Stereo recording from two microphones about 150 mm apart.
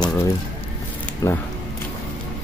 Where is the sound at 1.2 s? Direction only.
20° left (ahead or behind).